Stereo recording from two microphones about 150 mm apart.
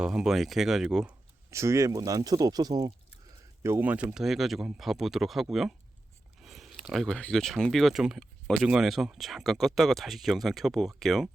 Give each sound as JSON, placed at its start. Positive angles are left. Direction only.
{"t": 0.0, "sound": "speech", "side_deg": -5}
{"t": 1.5, "sound": "speech", "side_deg": -20}
{"t": 3.6, "sound": "speech", "side_deg": -15}